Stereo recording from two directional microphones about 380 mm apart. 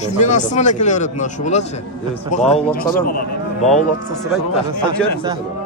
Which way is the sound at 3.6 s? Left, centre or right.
Centre.